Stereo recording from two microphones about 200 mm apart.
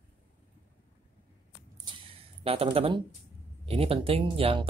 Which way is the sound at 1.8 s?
25° right (ahead or behind).